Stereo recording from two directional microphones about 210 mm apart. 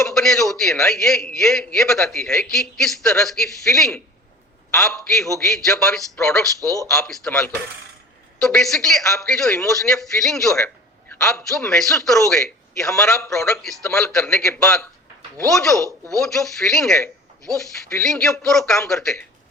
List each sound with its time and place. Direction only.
0.0 s a man's voice: centre (ahead or behind)
6.6 s speech: 15° right (ahead or behind)
6.9 s a man's voice: 5° left (ahead or behind)